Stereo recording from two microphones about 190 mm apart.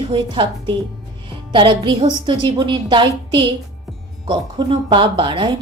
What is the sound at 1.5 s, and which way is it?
A woman's voice, 25° right (ahead or behind).